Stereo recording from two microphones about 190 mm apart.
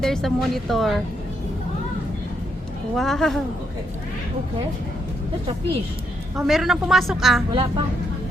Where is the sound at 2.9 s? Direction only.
Centre (ahead or behind).